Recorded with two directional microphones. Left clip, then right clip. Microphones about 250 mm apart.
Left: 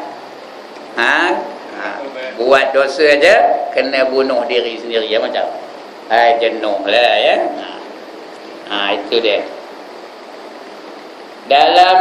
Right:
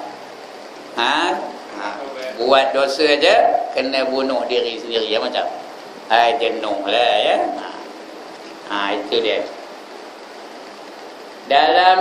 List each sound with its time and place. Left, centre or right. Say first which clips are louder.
0.9 s speech: left 5 dB; centre
2.3 s a man's voice: left 4 dB; centre
8.6 s a man's voice: left 4 dB; centre
11.4 s a man's voice: left 4 dB; centre